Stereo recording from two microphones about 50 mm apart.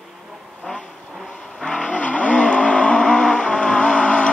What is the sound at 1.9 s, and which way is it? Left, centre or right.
Vehicle, left.